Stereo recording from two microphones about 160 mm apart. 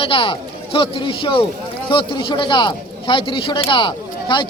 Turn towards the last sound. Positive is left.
turn(degrees=30)  # may be behind; listen again after turning